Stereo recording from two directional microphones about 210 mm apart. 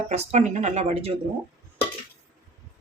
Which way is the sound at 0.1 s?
35° right (ahead or behind).